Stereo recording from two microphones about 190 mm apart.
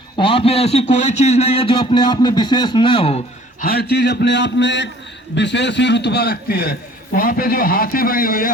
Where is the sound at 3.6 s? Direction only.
55° left (ahead or behind).